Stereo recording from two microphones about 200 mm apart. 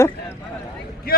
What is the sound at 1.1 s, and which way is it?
Boat, 50° left (ahead or behind).